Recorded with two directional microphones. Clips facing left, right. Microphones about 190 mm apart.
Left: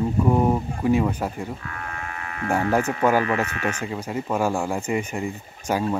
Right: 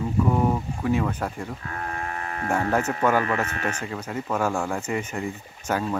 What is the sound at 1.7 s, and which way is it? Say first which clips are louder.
Livestock: right 3 dB; 35° right (ahead or behind).